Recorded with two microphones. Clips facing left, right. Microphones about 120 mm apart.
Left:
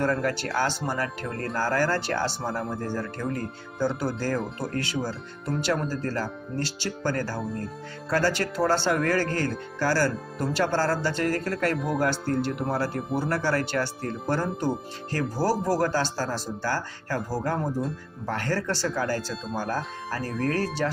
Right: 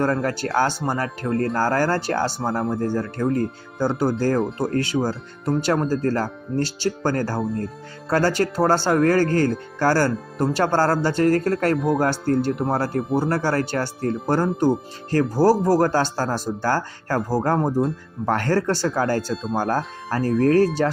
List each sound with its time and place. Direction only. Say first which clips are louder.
0.0 s speech: right 4 dB; 40° right (ahead or behind)
4.4 s speech: right 8 dB; centre (ahead or behind)
4.6 s speech: right 7 dB; 45° right (ahead or behind)
7.4 s speech: right 6 dB; centre (ahead or behind)
8.1 s speech: right 5 dB; 45° right (ahead or behind)